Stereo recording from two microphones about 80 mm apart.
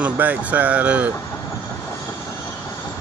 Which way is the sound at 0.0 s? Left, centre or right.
Centre.